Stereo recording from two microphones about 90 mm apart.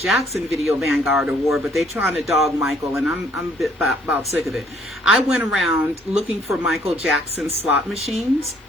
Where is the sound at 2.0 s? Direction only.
20° right (ahead or behind).